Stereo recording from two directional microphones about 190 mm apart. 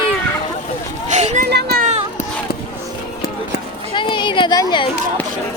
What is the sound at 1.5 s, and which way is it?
Children playing, 55° right (ahead or behind).